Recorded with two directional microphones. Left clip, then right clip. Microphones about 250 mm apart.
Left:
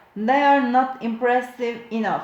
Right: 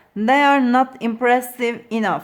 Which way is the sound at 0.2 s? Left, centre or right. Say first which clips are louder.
Right 2 dB; right.